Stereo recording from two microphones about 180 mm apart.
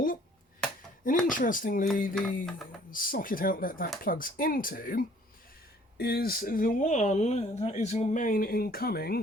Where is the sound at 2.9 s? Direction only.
50° left (ahead or behind).